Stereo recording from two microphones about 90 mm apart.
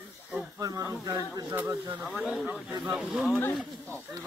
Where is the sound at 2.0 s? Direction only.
10° right (ahead or behind).